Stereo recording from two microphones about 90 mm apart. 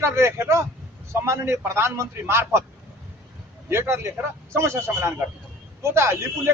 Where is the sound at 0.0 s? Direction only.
30° right (ahead or behind).